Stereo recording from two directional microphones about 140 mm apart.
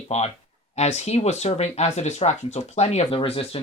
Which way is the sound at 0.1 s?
55° left (ahead or behind).